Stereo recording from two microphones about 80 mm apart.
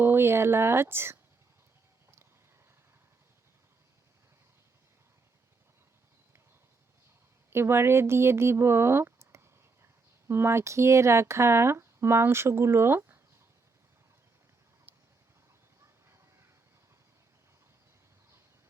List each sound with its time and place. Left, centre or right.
0.0 s speech: right
7.5 s speech: right